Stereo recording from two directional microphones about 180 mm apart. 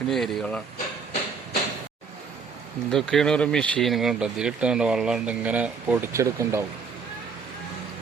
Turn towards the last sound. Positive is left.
turn(degrees=-15)  # may be behind; listen again after turning